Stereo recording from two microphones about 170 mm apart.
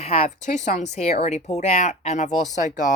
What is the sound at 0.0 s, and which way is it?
Speech, 40° left (ahead or behind).